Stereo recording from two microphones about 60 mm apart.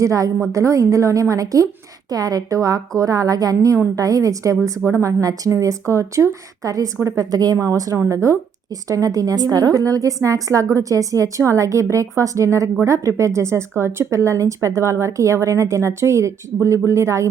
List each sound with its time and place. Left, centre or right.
0.0 s a woman's voice: right
2.0 s a woman's voice: right
4.9 s a woman's voice: right
5.2 s a woman's voice: right
5.5 s a woman's voice: right
8.9 s a woman's voice: right